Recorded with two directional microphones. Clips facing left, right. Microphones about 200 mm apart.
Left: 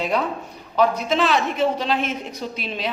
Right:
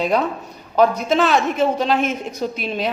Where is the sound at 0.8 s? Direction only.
45° right (ahead or behind).